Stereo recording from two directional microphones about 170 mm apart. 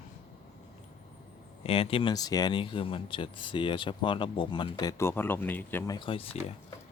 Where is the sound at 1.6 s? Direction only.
35° left (ahead or behind); by 5.9 s 10° left (ahead or behind).